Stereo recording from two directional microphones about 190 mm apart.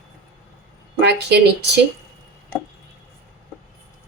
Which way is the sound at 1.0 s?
65° right (ahead or behind).